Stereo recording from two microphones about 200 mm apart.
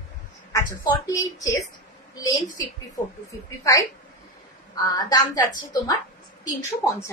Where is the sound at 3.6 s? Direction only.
15° left (ahead or behind).